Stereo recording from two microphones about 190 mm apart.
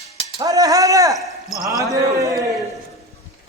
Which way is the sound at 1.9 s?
15° right (ahead or behind).